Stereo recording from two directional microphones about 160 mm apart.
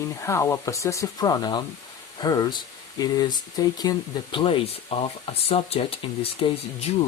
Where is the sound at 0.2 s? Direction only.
15° left (ahead or behind).